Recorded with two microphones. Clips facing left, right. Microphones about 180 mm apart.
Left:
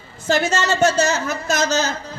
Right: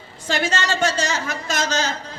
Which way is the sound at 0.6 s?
45° left (ahead or behind).